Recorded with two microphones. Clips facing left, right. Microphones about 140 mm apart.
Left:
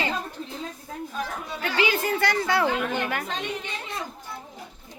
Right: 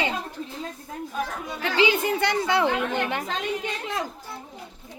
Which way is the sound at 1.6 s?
25° right (ahead or behind).